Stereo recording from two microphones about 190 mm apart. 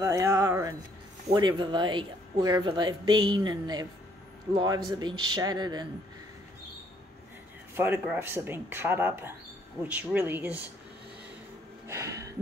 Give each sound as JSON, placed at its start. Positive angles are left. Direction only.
{"t": 0.0, "sound": "speech", "side_deg": -15}
{"t": 7.7, "sound": "speech", "side_deg": -10}
{"t": 11.9, "sound": "a sound", "side_deg": -15}